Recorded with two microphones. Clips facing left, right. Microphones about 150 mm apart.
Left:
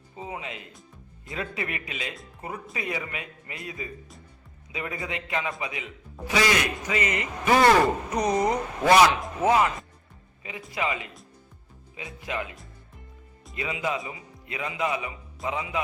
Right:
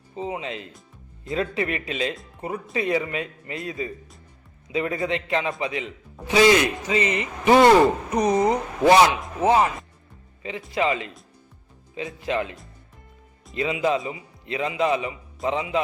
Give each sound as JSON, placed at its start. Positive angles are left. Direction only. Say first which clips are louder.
{"t": 0.2, "sound": "a man's voice", "louder": "right 6 dB", "side_deg": -25}